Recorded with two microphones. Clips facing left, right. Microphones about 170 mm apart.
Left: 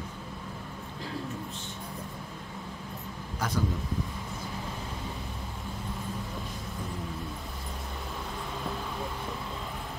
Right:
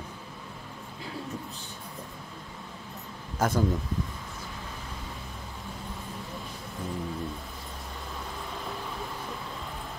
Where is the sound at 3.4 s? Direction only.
45° right (ahead or behind).